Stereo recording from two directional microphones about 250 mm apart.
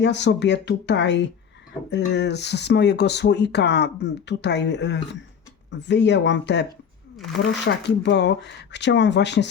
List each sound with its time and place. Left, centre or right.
0.0 s speech: left